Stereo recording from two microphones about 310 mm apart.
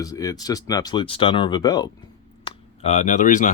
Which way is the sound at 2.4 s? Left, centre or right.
Left.